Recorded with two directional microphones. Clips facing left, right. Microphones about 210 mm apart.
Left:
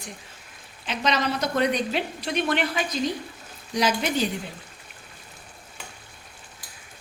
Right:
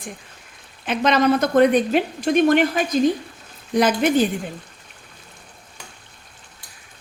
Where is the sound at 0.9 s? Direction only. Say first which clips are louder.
Right 8 dB; 55° right (ahead or behind).